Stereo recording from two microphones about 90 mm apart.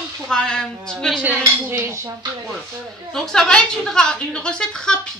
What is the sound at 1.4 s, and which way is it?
Dishes, 30° right (ahead or behind).